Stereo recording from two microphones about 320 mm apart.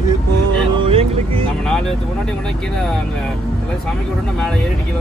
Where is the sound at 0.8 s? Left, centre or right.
Centre.